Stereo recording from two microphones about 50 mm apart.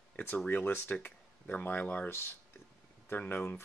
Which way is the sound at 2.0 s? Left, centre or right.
Left.